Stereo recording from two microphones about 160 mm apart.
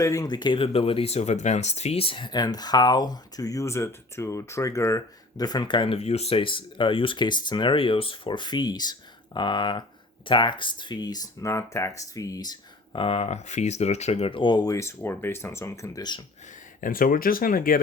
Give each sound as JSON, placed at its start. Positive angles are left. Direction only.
{"t": 0.0, "sound": "speech", "side_deg": 20}
{"t": 16.8, "sound": "speech", "side_deg": 60}